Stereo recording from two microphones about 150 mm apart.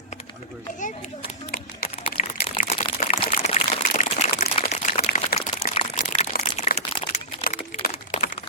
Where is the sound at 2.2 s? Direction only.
55° left (ahead or behind).